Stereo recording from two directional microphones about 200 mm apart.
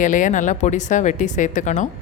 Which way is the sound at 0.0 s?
40° left (ahead or behind).